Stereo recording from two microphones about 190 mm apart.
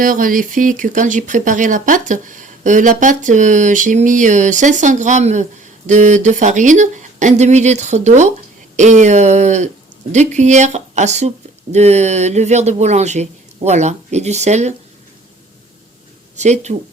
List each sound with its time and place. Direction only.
0.0 s speech: 45° right (ahead or behind)
16.4 s speech: 40° right (ahead or behind)